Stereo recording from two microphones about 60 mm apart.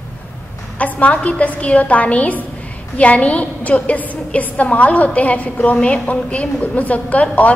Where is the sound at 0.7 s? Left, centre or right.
Left.